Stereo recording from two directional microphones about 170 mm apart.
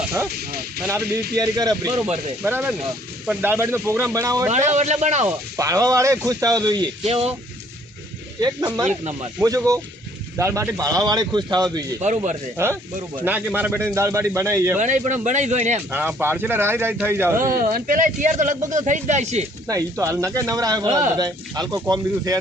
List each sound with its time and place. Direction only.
1.0 s speech: 70° right (ahead or behind)
1.4 s speech: 25° right (ahead or behind)
2.4 s speech: 10° right (ahead or behind)
4.5 s speech: 40° right (ahead or behind)
5.5 s speech: 20° right (ahead or behind)
7.1 s speech: 35° right (ahead or behind)
8.4 s speech: 25° right (ahead or behind)
12.0 s speech: 40° right (ahead or behind)
13.2 s speech: 10° right (ahead or behind)
14.8 s speech: 45° right (ahead or behind)
15.9 s speech: 10° right (ahead or behind)
17.5 s speech: 55° right (ahead or behind)
19.6 s speech: 20° right (ahead or behind)